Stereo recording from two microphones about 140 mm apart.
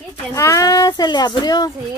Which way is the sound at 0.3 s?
25° left (ahead or behind).